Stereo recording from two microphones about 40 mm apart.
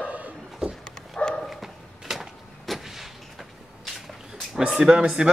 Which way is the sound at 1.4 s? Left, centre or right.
Centre.